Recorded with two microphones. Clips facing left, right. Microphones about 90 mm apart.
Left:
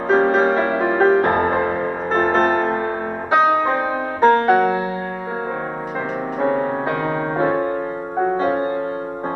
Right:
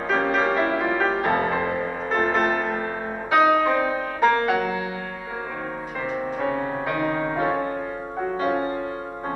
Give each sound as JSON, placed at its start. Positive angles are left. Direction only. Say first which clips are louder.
{"t": 0.1, "sound": "music", "louder": "left 6 dB", "side_deg": 35}
{"t": 6.4, "sound": "music", "louder": "left 8 dB", "side_deg": 35}